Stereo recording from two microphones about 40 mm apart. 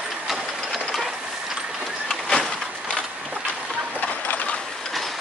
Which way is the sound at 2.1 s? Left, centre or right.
Centre.